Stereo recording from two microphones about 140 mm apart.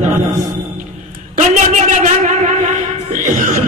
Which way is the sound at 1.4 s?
60° right (ahead or behind).